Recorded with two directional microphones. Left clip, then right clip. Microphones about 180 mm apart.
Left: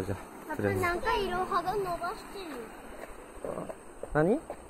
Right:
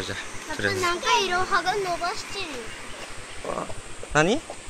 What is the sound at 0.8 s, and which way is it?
Speech, 45° right (ahead or behind).